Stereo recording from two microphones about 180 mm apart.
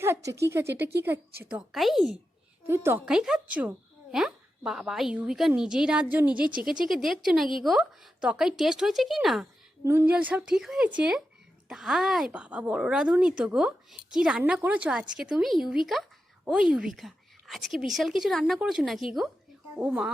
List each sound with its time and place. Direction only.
0.0 s speech: 15° right (ahead or behind)
1.5 s a woman's voice: 5° right (ahead or behind)
2.6 s a woman's voice: 15° right (ahead or behind)
9.8 s a woman's voice: 15° right (ahead or behind)